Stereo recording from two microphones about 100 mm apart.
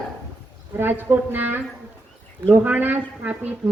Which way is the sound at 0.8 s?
20° right (ahead or behind).